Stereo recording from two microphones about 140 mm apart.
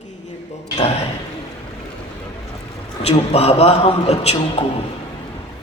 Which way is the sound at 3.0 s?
45° left (ahead or behind).